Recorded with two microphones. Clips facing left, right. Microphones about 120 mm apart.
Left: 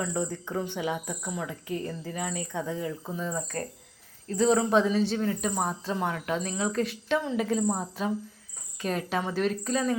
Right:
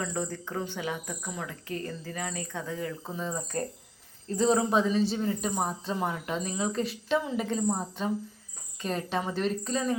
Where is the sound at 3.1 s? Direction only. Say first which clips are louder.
Right 2 dB; 15° right (ahead or behind).